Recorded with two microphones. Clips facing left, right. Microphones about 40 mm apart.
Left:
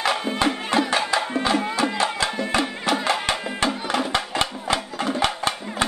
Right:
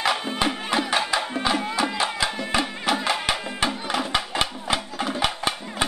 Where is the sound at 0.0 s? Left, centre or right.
Centre.